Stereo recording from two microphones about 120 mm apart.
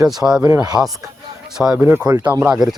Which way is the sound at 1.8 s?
15° right (ahead or behind).